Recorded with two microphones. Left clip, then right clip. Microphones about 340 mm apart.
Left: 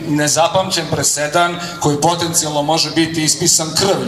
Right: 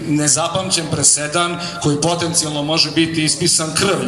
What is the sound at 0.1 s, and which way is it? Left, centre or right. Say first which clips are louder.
A man's voice: left 4 dB; left.